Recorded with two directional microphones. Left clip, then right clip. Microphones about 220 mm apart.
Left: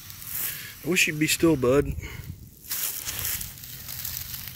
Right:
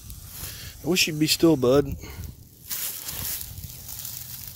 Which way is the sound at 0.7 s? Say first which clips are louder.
Even; 25° right (ahead or behind).